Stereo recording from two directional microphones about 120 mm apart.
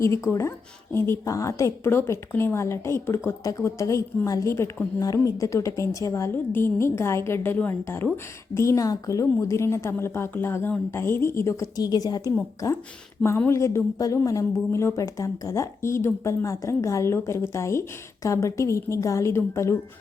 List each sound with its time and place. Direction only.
0.0 s a woman's voice: 25° left (ahead or behind)